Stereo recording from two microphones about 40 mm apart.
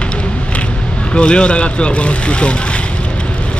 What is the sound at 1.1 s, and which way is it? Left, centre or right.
Speech, left.